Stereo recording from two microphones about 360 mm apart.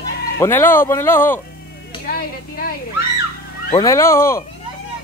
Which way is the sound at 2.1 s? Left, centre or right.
Left.